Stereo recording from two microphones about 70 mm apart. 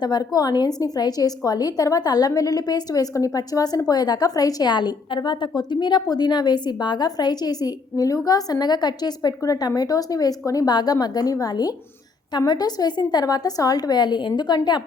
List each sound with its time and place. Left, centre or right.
0.0 s a woman's voice: left
9.4 s a woman's voice: left